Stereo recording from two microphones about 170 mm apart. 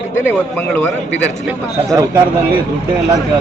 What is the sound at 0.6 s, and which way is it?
Speech, 10° left (ahead or behind).